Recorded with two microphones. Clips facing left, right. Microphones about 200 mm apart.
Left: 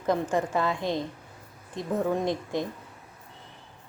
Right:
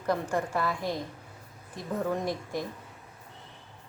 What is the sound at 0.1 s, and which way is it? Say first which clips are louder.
A woman's voice: left 3 dB; 20° left (ahead or behind).